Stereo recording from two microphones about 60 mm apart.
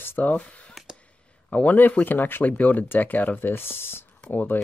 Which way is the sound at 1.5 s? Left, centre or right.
Left.